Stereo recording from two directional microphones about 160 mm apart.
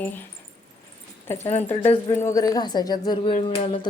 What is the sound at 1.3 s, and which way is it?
Speech, 15° left (ahead or behind).